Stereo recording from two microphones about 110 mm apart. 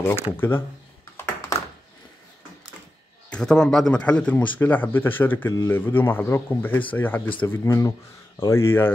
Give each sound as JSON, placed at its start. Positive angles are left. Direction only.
{"t": 0.0, "sound": "speech", "side_deg": 20}
{"t": 3.3, "sound": "speech", "side_deg": 5}